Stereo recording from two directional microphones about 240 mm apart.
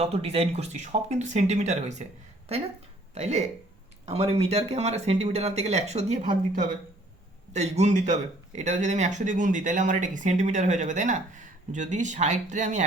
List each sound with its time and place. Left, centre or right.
0.0 s speech: right
3.2 s speech: right